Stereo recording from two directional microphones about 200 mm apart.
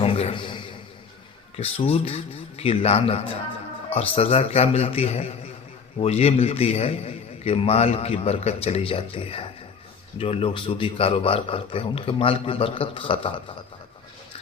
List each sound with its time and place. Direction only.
0.0 s a man's voice: 30° left (ahead or behind)